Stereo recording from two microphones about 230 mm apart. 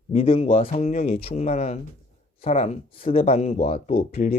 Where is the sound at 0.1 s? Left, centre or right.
Left.